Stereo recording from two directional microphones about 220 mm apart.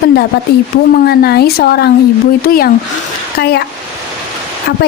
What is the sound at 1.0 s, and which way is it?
Speech, 45° left (ahead or behind).